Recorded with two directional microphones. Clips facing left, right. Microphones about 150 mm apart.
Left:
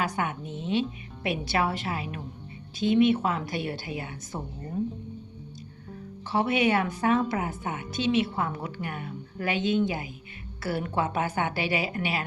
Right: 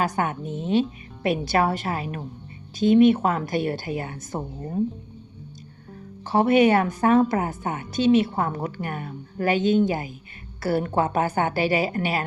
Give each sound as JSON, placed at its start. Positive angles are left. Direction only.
{"t": 0.0, "sound": "a woman's voice", "side_deg": -40}
{"t": 6.2, "sound": "a woman's voice", "side_deg": -45}